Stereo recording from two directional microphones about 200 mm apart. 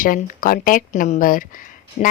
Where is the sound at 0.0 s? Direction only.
45° left (ahead or behind).